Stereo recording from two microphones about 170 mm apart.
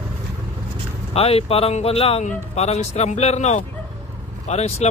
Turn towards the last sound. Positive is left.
turn(degrees=40)  # may be behind; listen again after turning